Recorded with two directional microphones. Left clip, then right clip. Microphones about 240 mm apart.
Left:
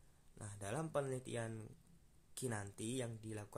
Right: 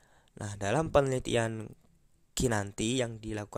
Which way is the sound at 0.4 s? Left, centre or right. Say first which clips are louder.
Right 15 dB; right.